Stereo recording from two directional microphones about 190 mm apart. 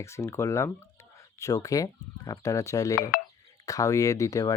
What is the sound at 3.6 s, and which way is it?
Speech, 15° left (ahead or behind).